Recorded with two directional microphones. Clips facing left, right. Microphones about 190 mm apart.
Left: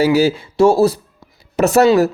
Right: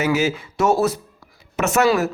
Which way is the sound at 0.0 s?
35° left (ahead or behind).